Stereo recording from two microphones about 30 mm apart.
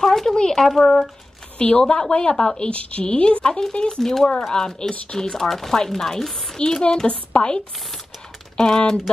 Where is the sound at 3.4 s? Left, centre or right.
Left.